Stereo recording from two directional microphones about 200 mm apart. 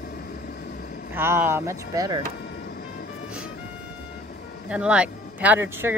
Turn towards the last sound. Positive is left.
turn(degrees=-10)  # may be behind; listen again after turning